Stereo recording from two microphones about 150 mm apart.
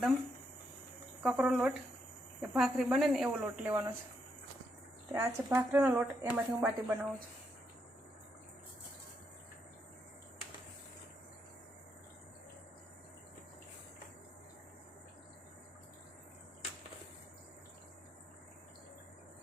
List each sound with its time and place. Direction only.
1.2 s speech: 5° right (ahead or behind)
3.2 s a woman's voice: 15° right (ahead or behind)
5.1 s a woman's voice: 15° right (ahead or behind)